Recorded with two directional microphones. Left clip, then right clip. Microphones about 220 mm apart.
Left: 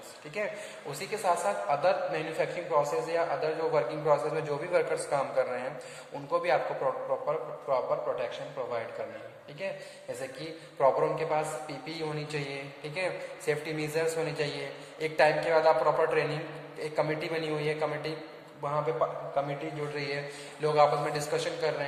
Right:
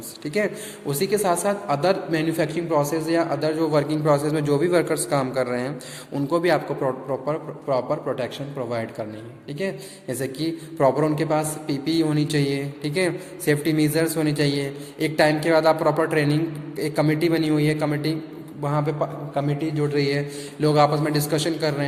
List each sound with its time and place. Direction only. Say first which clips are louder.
0.3 s a man's voice: right 9 dB; 40° right (ahead or behind)
10.4 s a man's voice: right 6 dB; 45° right (ahead or behind)
19.4 s a man's voice: right 9 dB; 45° right (ahead or behind)